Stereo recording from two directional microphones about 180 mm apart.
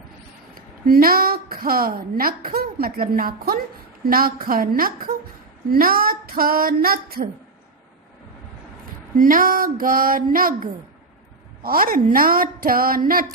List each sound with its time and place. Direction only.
0.5 s a woman's voice: 55° right (ahead or behind)
9.1 s a woman's voice: 50° right (ahead or behind)